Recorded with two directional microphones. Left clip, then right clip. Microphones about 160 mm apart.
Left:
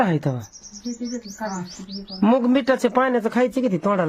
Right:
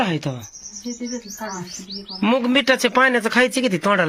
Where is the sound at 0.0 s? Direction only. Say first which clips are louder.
Left 1 dB; 40° left (ahead or behind).